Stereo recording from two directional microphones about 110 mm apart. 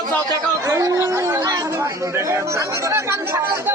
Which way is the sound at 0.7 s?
30° right (ahead or behind).